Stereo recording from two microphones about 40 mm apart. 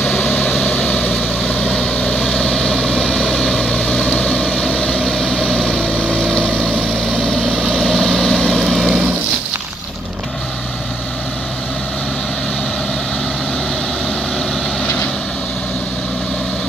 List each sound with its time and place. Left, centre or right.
0.4 s vehicle: centre
4.9 s vehicle: centre
5.9 s vehicle: left
7.8 s vehicle: centre